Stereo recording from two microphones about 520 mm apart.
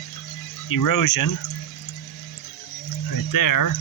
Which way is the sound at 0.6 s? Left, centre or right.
Left.